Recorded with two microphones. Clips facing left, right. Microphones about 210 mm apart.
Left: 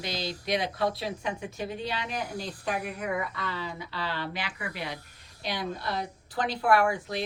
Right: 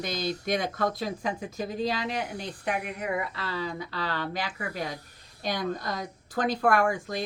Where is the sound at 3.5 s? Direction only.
40° right (ahead or behind).